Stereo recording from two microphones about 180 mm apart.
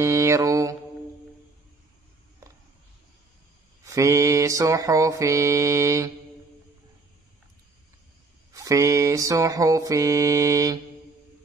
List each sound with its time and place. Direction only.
0.0 s mantra: 15° right (ahead or behind)
3.8 s mantra: 15° right (ahead or behind)
8.5 s mantra: 20° right (ahead or behind)